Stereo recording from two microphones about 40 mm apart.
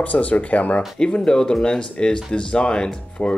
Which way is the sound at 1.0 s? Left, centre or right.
Centre.